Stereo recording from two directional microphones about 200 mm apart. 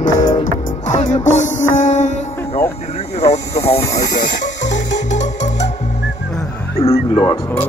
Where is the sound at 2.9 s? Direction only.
35° left (ahead or behind).